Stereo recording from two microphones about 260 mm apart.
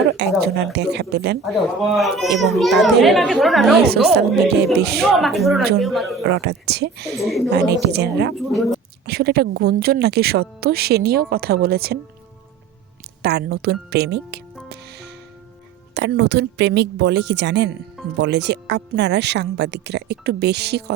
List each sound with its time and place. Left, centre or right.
0.1 s speech: right
1.5 s a child's voice: centre
4.1 s speech: right
5.1 s a child's voice: centre
6.2 s speech: right
7.1 s a child's voice: centre
7.7 s speech: right
8.4 s a child's voice: centre
9.0 s speech: right
13.2 s speech: right
14.7 s music: right
16.0 s speech: right